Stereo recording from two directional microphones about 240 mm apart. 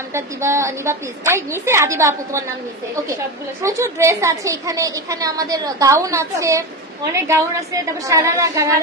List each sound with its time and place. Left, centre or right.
0.1 s a woman's voice: centre
3.6 s a woman's voice: centre